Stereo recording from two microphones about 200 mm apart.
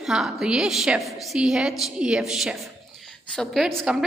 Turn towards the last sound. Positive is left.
turn(degrees=0)  # may be behind; listen again after turning